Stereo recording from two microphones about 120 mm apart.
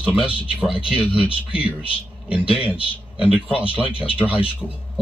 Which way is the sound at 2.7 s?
50° left (ahead or behind).